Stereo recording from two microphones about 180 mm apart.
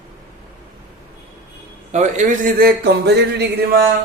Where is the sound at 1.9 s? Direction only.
40° right (ahead or behind); by 3.4 s 65° right (ahead or behind).